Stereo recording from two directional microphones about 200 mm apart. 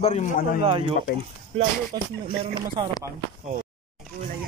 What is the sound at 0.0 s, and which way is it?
Speech, 35° left (ahead or behind).